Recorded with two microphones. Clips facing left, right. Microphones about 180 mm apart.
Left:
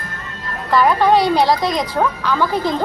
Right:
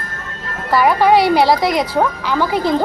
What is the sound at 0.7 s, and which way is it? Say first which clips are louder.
A woman's voice: right 1 dB; 10° right (ahead or behind).